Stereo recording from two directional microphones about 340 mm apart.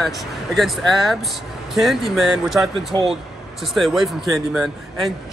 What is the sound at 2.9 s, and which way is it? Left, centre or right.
Speech, centre.